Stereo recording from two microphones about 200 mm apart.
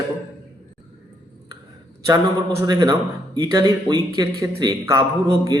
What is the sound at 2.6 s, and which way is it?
A man's voice, 20° right (ahead or behind).